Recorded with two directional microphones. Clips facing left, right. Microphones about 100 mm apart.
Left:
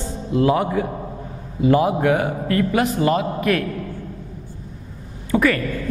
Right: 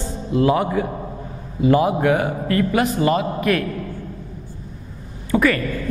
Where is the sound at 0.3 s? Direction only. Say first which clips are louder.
Even; 10° right (ahead or behind).